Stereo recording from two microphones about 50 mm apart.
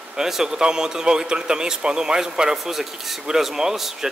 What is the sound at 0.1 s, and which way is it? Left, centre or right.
A man's voice, centre.